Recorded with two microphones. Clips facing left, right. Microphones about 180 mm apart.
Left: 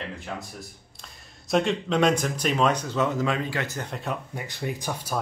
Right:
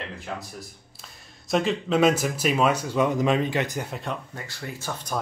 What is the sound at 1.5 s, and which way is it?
Speech, centre (ahead or behind).